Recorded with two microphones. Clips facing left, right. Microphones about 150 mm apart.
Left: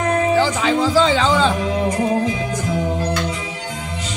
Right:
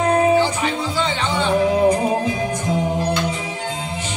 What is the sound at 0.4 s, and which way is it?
Music, 90° left.